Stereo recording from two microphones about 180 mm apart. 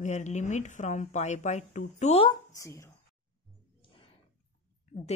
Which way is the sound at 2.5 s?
15° left (ahead or behind).